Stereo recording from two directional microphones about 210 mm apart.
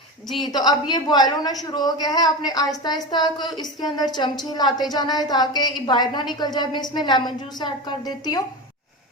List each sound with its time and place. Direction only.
0.4 s a woman's voice: 20° left (ahead or behind)